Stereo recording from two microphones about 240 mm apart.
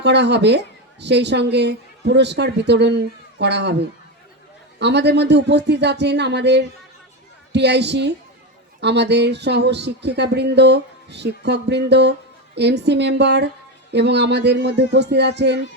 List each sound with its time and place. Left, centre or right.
0.0 s speech: right